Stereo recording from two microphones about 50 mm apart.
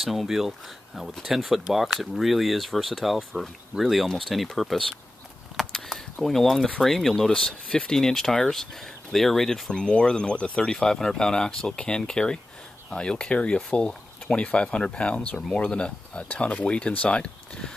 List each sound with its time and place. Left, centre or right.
0.0 s speech: centre
5.6 s a sound: centre
6.4 s speech: centre